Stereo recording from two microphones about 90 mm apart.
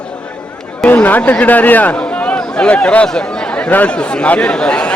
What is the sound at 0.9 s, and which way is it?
A man's voice, 20° left (ahead or behind).